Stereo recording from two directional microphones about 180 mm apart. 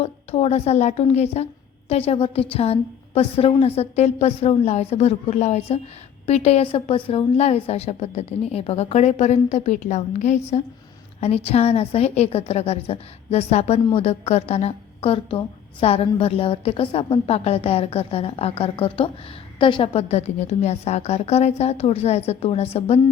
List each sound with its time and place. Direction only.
0.0 s a woman's voice: 35° left (ahead or behind)